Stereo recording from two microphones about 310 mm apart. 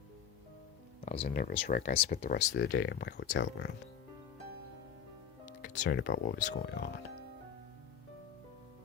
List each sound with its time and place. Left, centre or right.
1.0 s speech: left
5.5 s speech: left